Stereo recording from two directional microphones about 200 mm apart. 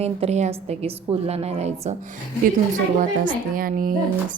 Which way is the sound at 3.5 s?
45° right (ahead or behind).